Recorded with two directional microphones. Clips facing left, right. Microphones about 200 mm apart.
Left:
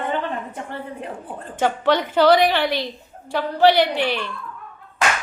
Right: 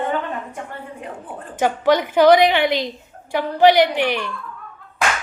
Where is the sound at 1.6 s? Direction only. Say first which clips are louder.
Right 2 dB; 10° right (ahead or behind).